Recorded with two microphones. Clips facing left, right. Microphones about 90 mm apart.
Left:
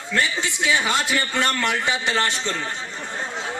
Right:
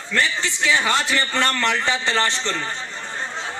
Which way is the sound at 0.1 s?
15° left (ahead or behind).